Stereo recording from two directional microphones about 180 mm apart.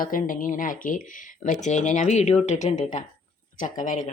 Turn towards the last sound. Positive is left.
turn(degrees=45)  # may be behind; listen again after turning